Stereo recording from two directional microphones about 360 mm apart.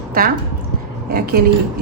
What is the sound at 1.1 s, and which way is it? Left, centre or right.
Speech, right.